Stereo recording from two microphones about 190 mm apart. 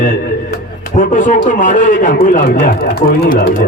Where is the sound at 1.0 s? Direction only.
45° left (ahead or behind).